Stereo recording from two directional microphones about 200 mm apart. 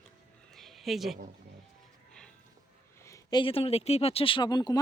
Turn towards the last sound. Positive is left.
turn(degrees=20)  # may be behind; listen again after turning